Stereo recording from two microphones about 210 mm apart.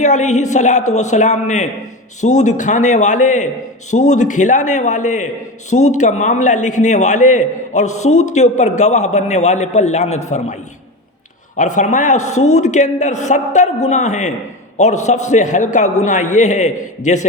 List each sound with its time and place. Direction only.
0.0 s a woman's voice: 35° left (ahead or behind)